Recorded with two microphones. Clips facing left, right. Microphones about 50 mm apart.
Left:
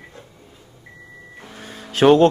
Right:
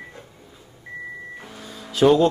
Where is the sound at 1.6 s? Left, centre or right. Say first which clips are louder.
Left 2 dB; left.